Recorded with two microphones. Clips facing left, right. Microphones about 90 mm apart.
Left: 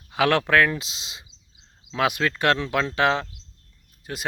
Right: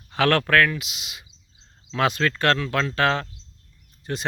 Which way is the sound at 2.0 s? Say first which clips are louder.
Right 1 dB; 10° left (ahead or behind).